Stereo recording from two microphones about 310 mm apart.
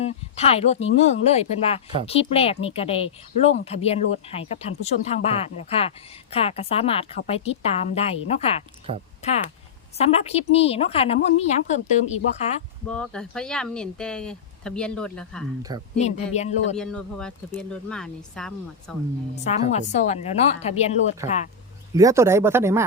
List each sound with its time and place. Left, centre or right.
0.3 s a woman's voice: centre
12.9 s speech: centre
16.0 s a woman's voice: left
16.7 s speech: centre
19.7 s a woman's voice: left
21.9 s speech: centre